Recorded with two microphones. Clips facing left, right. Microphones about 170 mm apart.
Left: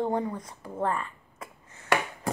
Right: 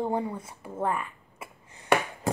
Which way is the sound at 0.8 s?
10° right (ahead or behind).